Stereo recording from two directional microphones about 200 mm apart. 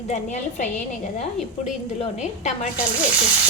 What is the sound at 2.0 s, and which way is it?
Speech, 35° left (ahead or behind).